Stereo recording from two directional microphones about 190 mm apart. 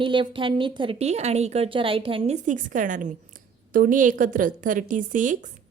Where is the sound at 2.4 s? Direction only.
45° right (ahead or behind).